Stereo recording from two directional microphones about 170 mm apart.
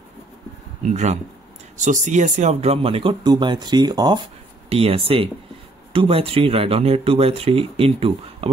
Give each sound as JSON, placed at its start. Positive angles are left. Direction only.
{"t": 0.8, "sound": "speech", "side_deg": -45}
{"t": 4.6, "sound": "speech", "side_deg": -35}